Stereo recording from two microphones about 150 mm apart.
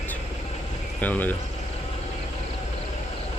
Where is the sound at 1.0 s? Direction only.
10° left (ahead or behind).